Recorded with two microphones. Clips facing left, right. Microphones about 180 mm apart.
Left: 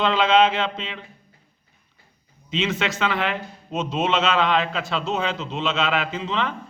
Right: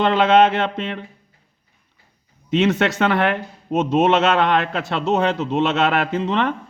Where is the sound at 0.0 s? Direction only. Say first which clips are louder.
Right 4 dB; 60° right (ahead or behind).